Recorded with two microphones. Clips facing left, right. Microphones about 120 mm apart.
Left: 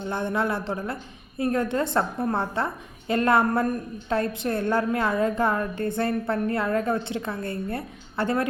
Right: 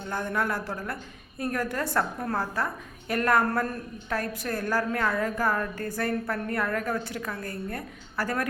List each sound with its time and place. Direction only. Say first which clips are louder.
0.1 s a woman's voice: left 3 dB; 20° left (ahead or behind)